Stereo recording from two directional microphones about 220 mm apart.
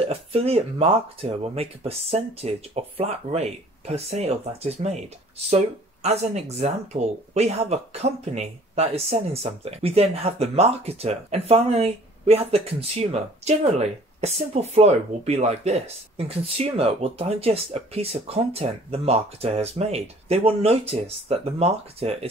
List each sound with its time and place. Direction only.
0.1 s speech: 25° right (ahead or behind)
6.0 s speech: 30° right (ahead or behind)